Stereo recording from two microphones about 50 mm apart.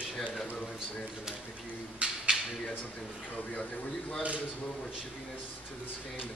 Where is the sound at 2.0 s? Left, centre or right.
Right.